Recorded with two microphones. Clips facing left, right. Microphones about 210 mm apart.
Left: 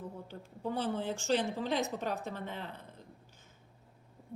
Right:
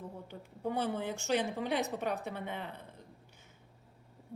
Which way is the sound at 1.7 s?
60° right (ahead or behind).